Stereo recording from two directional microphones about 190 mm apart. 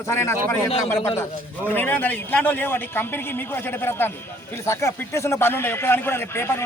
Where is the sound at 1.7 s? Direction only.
10° left (ahead or behind).